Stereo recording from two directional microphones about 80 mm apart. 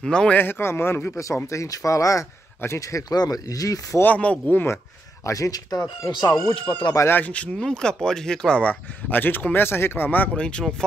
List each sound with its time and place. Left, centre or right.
0.0 s speech: centre
0.4 s speech: left
1.2 s speech: left
4.0 s speech: centre
5.2 s speech: left
6.5 s speech: left
7.1 s speech: left
9.1 s speech: left
10.8 s speech: centre